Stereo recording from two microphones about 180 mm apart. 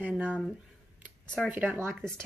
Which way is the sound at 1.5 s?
10° right (ahead or behind).